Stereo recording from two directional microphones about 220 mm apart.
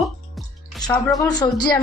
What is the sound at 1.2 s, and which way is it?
Speech, 15° left (ahead or behind).